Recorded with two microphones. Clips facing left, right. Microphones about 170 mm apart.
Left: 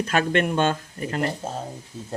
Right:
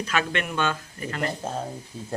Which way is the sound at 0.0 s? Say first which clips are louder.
Left 5 dB; 45° left (ahead or behind).